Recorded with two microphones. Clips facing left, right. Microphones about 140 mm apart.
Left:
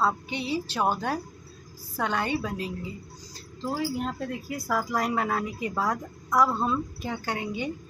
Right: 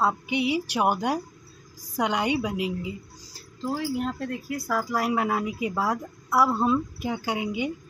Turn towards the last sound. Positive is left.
turn(degrees=-10)  # may be behind; listen again after turning